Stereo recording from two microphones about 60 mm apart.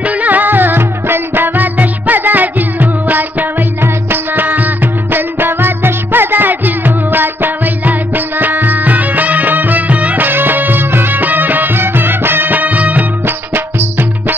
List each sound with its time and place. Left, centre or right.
0.0 s music: right